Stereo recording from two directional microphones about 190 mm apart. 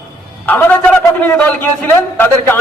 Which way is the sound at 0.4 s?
10° left (ahead or behind).